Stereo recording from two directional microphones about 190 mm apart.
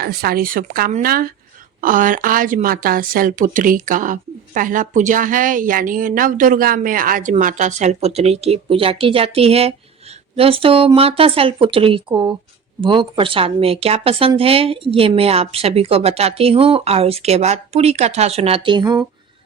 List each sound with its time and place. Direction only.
0.0 s a woman's voice: 55° right (ahead or behind); by 19.0 s 25° right (ahead or behind)